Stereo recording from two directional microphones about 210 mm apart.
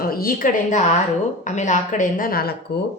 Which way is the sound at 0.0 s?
45° left (ahead or behind).